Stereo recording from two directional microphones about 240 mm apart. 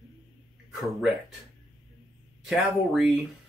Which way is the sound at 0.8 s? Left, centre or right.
Centre.